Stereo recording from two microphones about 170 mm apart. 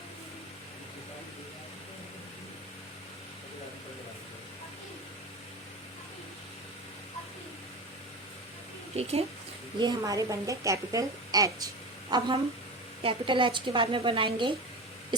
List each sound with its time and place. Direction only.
9.0 s speech: 35° right (ahead or behind)
9.7 s a woman's voice: 25° right (ahead or behind)